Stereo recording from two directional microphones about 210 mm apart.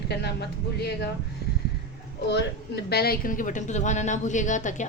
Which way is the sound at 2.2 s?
55° left (ahead or behind).